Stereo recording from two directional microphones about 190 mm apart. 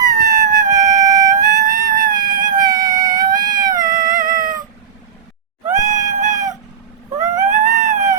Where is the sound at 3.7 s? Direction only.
45° right (ahead or behind).